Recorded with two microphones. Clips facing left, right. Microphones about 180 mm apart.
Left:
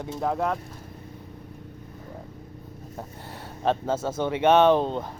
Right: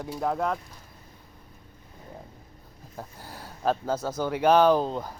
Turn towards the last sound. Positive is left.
turn(degrees=0)  # may be behind; listen again after turning